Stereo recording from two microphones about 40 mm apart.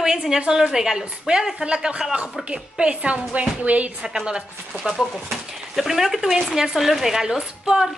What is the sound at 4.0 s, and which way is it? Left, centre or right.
Speech, right.